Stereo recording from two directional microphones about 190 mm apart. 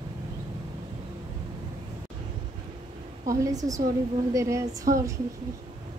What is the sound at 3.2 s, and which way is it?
Speech, 20° right (ahead or behind).